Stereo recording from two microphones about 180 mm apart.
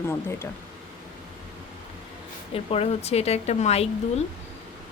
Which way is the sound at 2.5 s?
35° left (ahead or behind).